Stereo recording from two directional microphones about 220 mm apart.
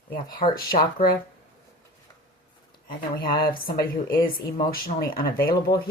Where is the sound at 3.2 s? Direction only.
40° left (ahead or behind).